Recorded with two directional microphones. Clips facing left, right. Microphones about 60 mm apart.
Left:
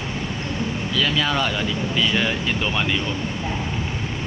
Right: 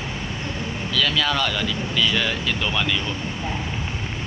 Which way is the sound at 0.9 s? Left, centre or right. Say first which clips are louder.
Even; centre.